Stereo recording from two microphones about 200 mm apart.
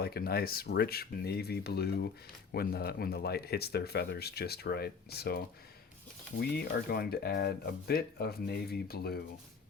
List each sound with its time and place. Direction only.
0.0 s speech: 50° left (ahead or behind)
6.4 s speech: 50° left (ahead or behind)